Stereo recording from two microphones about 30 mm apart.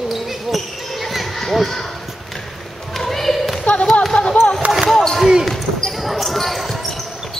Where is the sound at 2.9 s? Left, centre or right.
Centre.